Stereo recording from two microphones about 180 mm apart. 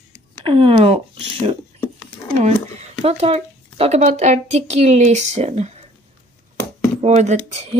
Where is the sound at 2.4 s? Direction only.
40° right (ahead or behind).